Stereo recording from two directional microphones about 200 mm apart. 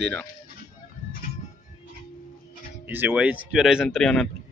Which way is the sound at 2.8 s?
10° right (ahead or behind).